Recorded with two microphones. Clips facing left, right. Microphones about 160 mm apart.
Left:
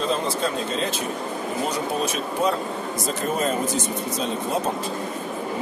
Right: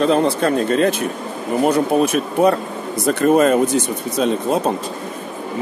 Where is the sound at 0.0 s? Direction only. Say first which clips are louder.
Right 8 dB; 65° right (ahead or behind).